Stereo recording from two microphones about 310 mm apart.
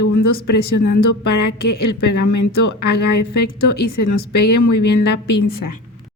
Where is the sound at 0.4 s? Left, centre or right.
Left.